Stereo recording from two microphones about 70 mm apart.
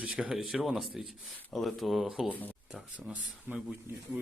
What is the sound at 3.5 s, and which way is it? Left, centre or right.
Speech, right.